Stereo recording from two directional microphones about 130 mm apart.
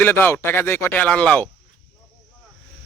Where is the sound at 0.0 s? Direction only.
15° left (ahead or behind).